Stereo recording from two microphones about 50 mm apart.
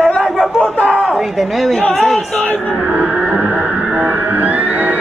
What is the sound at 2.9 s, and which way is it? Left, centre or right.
Music, right.